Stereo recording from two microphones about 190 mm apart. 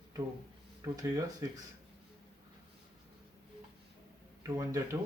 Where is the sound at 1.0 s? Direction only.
20° right (ahead or behind).